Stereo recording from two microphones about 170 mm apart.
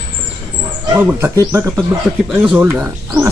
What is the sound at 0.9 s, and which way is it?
Speech, 15° right (ahead or behind).